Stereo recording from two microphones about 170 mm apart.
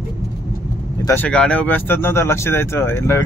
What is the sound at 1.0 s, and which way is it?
Speech, 10° left (ahead or behind).